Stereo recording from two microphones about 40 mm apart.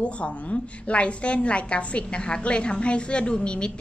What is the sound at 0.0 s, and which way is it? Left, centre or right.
A woman's voice, left.